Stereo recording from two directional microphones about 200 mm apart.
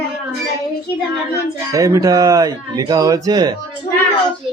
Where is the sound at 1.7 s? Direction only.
15° right (ahead or behind).